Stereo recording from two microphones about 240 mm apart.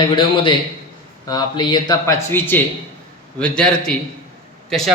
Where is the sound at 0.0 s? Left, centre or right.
Centre.